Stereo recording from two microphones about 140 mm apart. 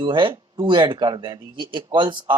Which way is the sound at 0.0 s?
35° right (ahead or behind).